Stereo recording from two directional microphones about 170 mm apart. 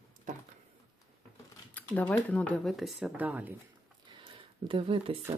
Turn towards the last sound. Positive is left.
turn(degrees=-30)  # may be behind; listen again after turning